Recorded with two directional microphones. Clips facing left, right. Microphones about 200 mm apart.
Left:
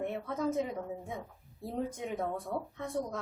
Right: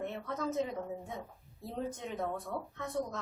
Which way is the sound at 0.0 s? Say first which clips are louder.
Left 3 dB; 10° left (ahead or behind).